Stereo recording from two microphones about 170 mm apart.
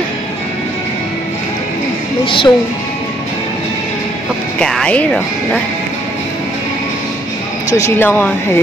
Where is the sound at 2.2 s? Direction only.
30° left (ahead or behind).